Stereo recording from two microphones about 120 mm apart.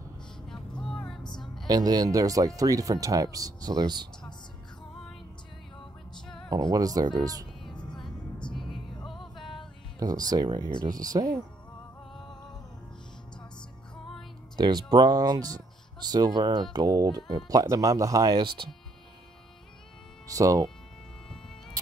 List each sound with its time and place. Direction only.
0.5 s vehicle: 5° left (ahead or behind)
1.4 s music: centre (ahead or behind)
1.7 s speech: 35° right (ahead or behind)
6.2 s music: 5° left (ahead or behind)
6.7 s speech: 30° right (ahead or behind)
8.5 s music: centre (ahead or behind)
9.9 s speech: 30° right (ahead or behind)
14.6 s speech: 35° right (ahead or behind)
20.3 s speech: 30° right (ahead or behind)